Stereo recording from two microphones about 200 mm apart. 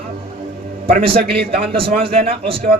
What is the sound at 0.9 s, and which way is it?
A man's voice, 30° right (ahead or behind).